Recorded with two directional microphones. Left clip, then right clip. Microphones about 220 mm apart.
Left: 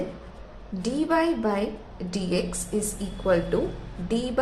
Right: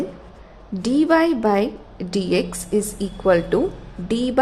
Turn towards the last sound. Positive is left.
turn(degrees=-40)  # may be behind; listen again after turning